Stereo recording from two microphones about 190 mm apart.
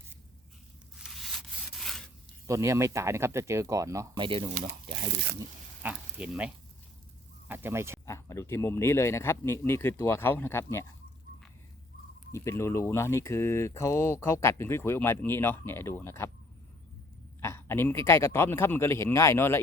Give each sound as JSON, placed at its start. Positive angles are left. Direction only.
{"t": 1.0, "sound": "rub", "side_deg": 0}
{"t": 2.5, "sound": "speech", "side_deg": -15}
{"t": 5.8, "sound": "speech", "side_deg": -5}
{"t": 8.0, "sound": "speech", "side_deg": 15}
{"t": 12.3, "sound": "speech", "side_deg": 15}
{"t": 17.4, "sound": "speech", "side_deg": 15}